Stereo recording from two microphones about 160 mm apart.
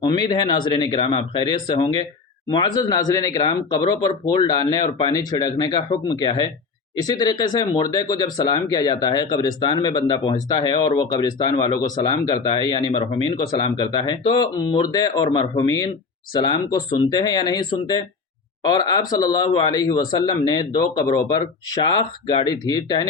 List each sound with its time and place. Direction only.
0.0 s speech: 25° left (ahead or behind)
17.1 s speech: 25° left (ahead or behind)